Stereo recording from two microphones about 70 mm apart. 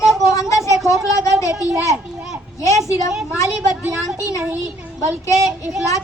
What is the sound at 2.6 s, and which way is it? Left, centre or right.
Speech, left.